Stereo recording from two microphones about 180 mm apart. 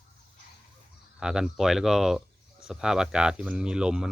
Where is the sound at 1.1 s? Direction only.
5° right (ahead or behind).